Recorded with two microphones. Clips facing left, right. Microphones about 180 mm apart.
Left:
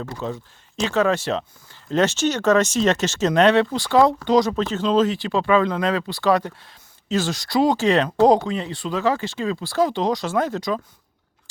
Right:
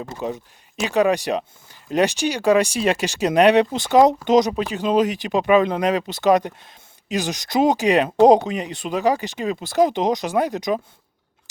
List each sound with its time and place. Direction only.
0.0 s speech: 15° right (ahead or behind)